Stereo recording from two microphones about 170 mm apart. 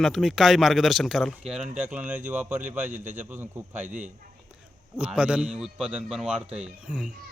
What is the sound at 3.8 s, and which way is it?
Speech, 45° right (ahead or behind).